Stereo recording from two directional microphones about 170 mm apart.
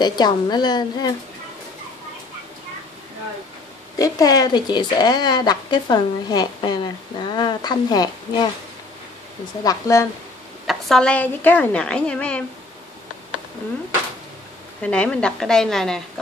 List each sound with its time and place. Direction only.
0.0 s speech: 25° left (ahead or behind)
4.0 s speech: 20° left (ahead or behind)
9.6 s speech: 20° left (ahead or behind)
10.7 s a woman's voice: centre (ahead or behind)
14.8 s a woman's voice: 5° left (ahead or behind)